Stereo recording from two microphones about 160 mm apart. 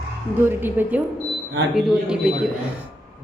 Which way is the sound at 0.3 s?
15° right (ahead or behind).